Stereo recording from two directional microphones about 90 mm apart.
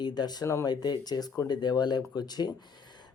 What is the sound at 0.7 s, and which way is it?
Speech, 50° left (ahead or behind).